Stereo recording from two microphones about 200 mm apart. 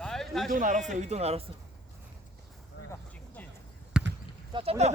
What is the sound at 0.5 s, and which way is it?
Speech, 40° right (ahead or behind).